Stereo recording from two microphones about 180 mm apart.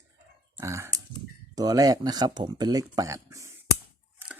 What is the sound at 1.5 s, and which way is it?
Speech, 20° right (ahead or behind).